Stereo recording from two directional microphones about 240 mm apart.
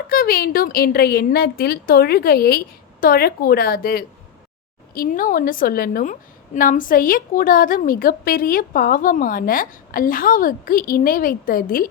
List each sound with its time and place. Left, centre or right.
0.1 s a woman's voice: left